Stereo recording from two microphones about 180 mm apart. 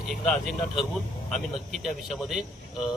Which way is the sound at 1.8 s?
Centre (ahead or behind).